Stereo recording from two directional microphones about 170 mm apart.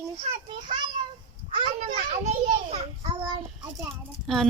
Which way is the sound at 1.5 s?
30° right (ahead or behind).